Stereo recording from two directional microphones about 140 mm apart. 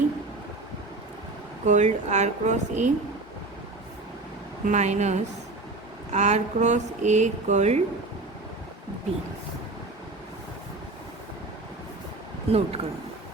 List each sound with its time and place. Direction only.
1.6 s speech: 55° right (ahead or behind)
4.6 s speech: 55° right (ahead or behind)
12.5 s speech: 45° right (ahead or behind)